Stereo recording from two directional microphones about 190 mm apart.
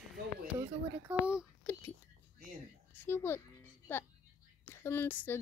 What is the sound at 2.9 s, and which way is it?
Music, 10° left (ahead or behind).